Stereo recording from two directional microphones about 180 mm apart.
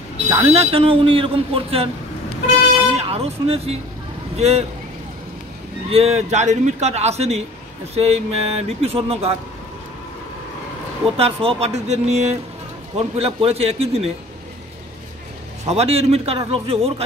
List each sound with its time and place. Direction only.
0.3 s speech: 35° right (ahead or behind)
3.0 s speech: 35° right (ahead or behind)
5.9 s speech: 35° right (ahead or behind)
11.1 s speech: 35° right (ahead or behind)
15.6 s speech: 35° right (ahead or behind)